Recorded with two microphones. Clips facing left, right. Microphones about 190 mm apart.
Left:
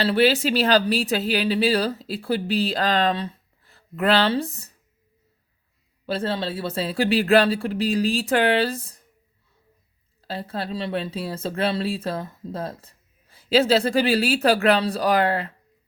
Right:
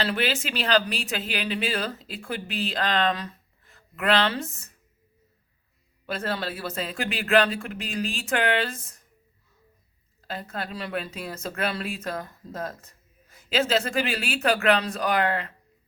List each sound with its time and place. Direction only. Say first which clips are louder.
0.0 s speech: left 8 dB; 35° left (ahead or behind)
6.1 s speech: left 4 dB; 30° left (ahead or behind)
10.2 s speech: left 4 dB; 30° left (ahead or behind)